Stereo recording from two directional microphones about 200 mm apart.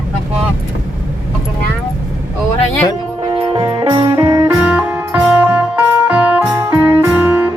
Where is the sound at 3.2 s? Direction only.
25° right (ahead or behind); by 7.5 s 10° right (ahead or behind).